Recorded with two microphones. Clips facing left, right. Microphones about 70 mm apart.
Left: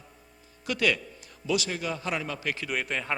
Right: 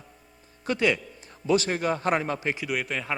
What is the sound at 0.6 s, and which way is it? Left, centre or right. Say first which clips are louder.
Speech: right 2 dB; right.